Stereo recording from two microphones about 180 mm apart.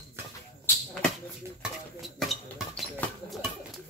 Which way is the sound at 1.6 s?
Centre (ahead or behind).